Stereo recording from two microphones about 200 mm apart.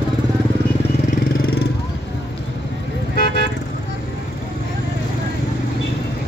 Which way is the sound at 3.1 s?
50° left (ahead or behind).